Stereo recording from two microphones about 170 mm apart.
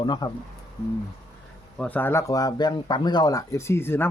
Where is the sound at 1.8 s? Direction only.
10° left (ahead or behind).